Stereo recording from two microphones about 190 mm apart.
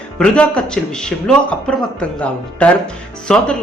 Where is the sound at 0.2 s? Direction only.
5° left (ahead or behind).